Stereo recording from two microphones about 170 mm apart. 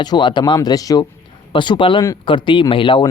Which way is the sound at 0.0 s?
25° left (ahead or behind).